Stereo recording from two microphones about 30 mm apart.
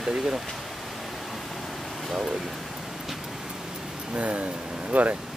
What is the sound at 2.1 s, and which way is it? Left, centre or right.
Speech, centre.